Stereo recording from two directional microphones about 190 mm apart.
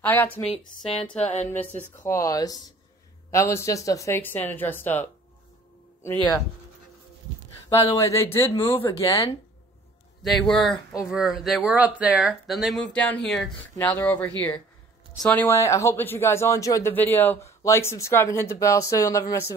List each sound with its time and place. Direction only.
0.0 s speech: 10° left (ahead or behind)
7.9 s speech: 15° left (ahead or behind)
10.5 s speech: 5° left (ahead or behind)